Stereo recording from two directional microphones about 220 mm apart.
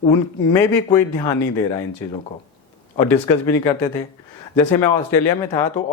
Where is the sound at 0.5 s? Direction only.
15° left (ahead or behind).